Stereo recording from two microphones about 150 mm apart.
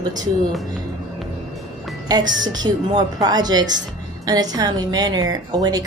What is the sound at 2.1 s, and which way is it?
A woman's voice, 25° right (ahead or behind).